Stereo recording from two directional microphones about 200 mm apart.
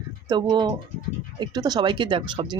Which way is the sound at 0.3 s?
20° right (ahead or behind).